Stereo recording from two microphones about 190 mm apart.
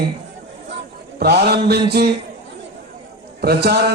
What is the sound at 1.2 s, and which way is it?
Speech, 55° right (ahead or behind).